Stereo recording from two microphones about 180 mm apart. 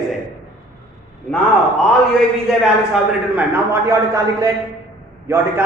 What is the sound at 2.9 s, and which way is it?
A man's voice, 10° right (ahead or behind).